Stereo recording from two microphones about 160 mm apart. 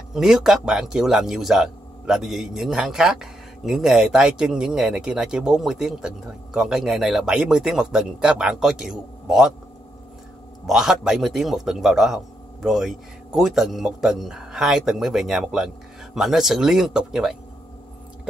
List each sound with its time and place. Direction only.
0.1 s speech: 5° right (ahead or behind)
10.7 s speech: 5° right (ahead or behind)